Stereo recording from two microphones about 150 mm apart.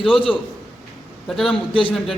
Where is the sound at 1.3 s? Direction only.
Centre (ahead or behind).